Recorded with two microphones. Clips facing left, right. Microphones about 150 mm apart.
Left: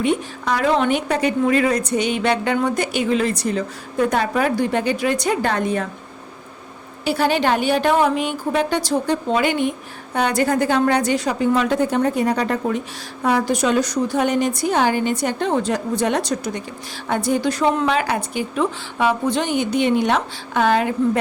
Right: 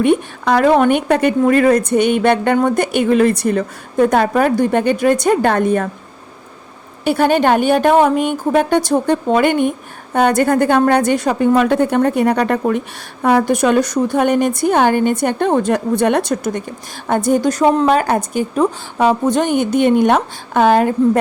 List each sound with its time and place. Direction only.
0.0 s a woman's voice: 55° right (ahead or behind)
7.0 s a woman's voice: 50° right (ahead or behind)